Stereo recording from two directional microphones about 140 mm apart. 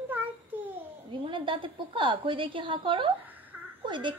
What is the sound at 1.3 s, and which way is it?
A woman's voice, 35° right (ahead or behind).